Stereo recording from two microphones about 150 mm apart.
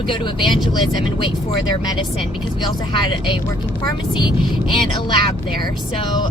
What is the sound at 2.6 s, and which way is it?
Speech, 35° left (ahead or behind).